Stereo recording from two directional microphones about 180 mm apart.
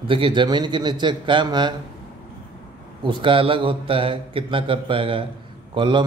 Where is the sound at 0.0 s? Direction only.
30° right (ahead or behind).